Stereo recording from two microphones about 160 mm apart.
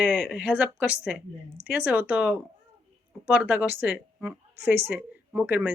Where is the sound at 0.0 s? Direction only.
5° right (ahead or behind).